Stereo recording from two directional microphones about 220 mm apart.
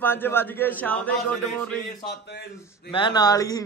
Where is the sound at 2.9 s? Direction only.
20° left (ahead or behind).